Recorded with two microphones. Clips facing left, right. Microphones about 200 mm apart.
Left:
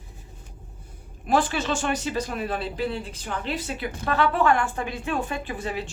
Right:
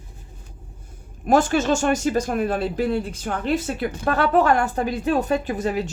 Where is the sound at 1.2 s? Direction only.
45° right (ahead or behind).